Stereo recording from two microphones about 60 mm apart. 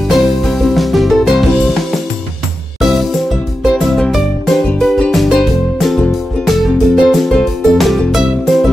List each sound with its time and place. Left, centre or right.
0.1 s music: centre
2.8 s music: centre
4.1 s music: centre